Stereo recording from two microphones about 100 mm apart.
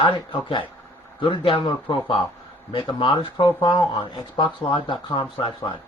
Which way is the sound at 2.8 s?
55° left (ahead or behind).